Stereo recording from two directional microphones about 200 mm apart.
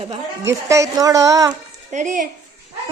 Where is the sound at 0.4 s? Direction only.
15° right (ahead or behind).